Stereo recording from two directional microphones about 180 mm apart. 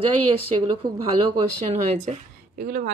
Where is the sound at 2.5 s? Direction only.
55° right (ahead or behind).